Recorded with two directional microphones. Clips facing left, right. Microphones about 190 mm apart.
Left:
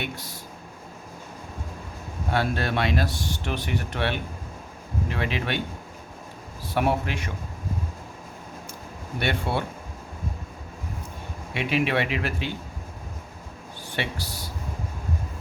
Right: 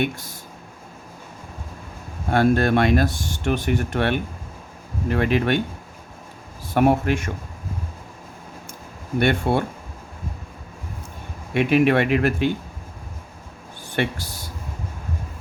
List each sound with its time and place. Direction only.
0.0 s speech: 50° right (ahead or behind)
2.3 s speech: 50° right (ahead or behind)
6.7 s speech: 50° right (ahead or behind)
9.1 s speech: 50° right (ahead or behind)
11.5 s speech: 50° right (ahead or behind)
13.9 s speech: 50° right (ahead or behind)